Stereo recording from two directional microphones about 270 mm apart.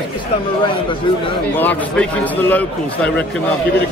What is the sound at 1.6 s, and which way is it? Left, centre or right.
A man's voice, centre.